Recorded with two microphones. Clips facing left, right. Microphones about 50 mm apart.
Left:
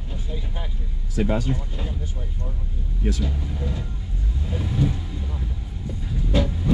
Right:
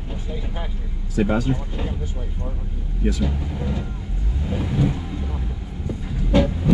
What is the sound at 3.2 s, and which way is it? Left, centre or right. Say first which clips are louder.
Speech: right 3 dB; right.